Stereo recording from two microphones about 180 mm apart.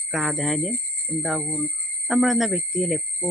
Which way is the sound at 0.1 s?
Centre (ahead or behind).